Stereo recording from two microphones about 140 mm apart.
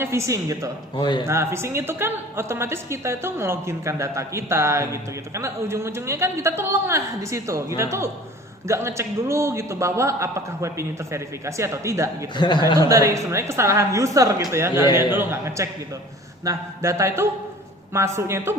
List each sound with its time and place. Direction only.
0.0 s a woman's voice: 20° right (ahead or behind)
0.9 s a man's voice: 30° left (ahead or behind)
1.3 s a woman's voice: 20° right (ahead or behind)
12.4 s a man's voice: 30° left (ahead or behind)
12.9 s a woman's voice: 25° right (ahead or behind)